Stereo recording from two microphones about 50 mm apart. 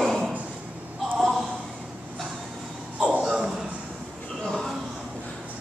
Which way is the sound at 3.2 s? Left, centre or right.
Centre.